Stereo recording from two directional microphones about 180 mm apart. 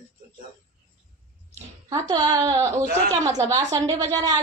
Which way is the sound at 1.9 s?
25° right (ahead or behind).